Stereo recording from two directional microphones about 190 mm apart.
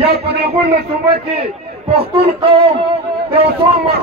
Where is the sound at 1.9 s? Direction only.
30° right (ahead or behind).